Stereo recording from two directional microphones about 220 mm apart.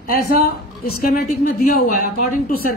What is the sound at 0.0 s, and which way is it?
A woman's voice, 40° left (ahead or behind).